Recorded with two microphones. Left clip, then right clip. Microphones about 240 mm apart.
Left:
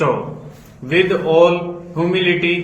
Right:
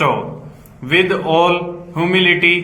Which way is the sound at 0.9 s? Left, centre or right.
Centre.